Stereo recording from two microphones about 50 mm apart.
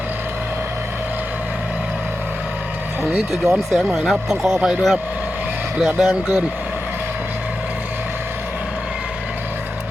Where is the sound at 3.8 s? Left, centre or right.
Centre.